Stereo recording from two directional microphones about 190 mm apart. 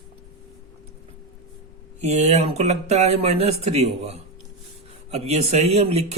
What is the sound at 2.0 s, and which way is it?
Speech, 35° right (ahead or behind).